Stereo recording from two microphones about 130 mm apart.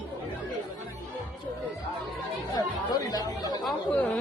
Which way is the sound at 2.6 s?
30° left (ahead or behind).